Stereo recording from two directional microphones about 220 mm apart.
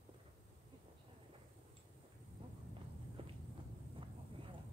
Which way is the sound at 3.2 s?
25° right (ahead or behind).